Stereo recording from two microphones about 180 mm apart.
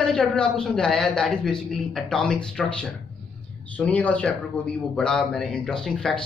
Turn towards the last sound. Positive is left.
turn(degrees=0)  # may be behind; listen again after turning